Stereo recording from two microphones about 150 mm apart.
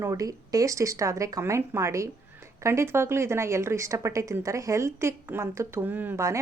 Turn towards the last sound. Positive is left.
turn(degrees=-20)  # may be behind; listen again after turning